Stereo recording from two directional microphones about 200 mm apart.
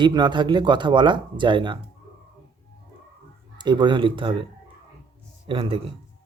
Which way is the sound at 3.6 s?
25° right (ahead or behind).